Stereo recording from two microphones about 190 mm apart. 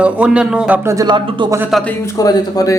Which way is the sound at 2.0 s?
20° left (ahead or behind).